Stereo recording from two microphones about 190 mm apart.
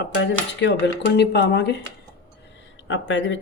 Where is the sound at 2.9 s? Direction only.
75° left (ahead or behind).